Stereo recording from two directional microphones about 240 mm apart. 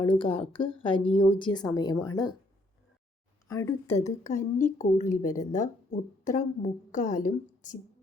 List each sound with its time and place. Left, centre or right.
0.2 s a woman's voice: left
3.5 s a woman's voice: centre
4.3 s speech: left